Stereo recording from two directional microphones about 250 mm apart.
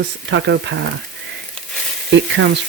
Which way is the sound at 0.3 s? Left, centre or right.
Right.